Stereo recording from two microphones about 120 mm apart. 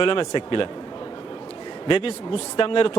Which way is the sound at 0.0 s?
45° left (ahead or behind).